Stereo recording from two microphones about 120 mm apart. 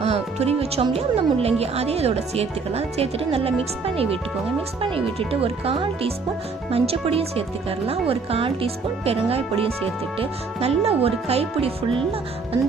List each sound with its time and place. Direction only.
0.0 s speech: 60° right (ahead or behind)